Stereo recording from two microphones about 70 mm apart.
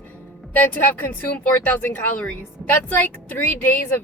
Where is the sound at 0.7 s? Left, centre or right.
Left.